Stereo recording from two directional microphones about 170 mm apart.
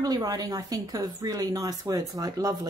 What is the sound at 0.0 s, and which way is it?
Speech, 20° right (ahead or behind).